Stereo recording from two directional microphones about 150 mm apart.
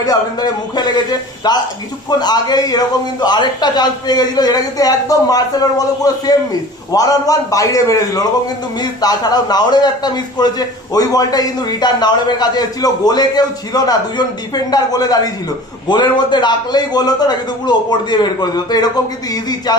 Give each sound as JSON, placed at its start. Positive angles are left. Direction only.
{"t": 0.0, "sound": "a man's voice", "side_deg": 25}
{"t": 6.9, "sound": "a man's voice", "side_deg": 25}